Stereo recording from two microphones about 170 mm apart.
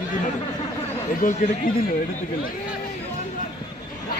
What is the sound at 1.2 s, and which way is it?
Speech, 55° left (ahead or behind).